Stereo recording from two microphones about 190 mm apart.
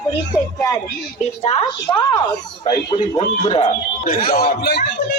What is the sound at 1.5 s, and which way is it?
Speech, 35° left (ahead or behind).